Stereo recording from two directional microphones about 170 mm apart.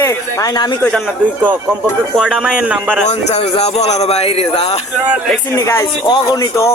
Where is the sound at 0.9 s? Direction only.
5° right (ahead or behind).